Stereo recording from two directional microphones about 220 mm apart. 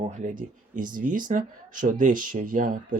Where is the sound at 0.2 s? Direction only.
35° right (ahead or behind).